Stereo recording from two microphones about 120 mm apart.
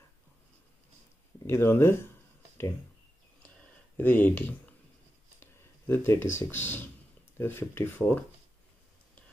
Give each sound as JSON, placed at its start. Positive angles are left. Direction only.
{"t": 1.5, "sound": "speech", "side_deg": 20}
{"t": 3.9, "sound": "speech", "side_deg": 15}